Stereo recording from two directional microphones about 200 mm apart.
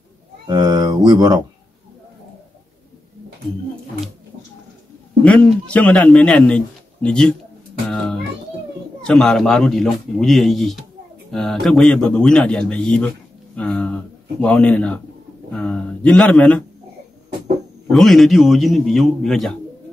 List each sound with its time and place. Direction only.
0.5 s speech: 20° right (ahead or behind)
5.2 s a man's voice: 5° left (ahead or behind)
7.9 s music: centre (ahead or behind)
9.0 s speech: centre (ahead or behind)
17.9 s speech: centre (ahead or behind)